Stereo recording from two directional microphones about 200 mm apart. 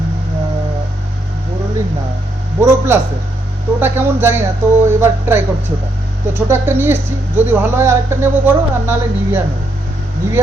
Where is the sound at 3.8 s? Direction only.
10° right (ahead or behind).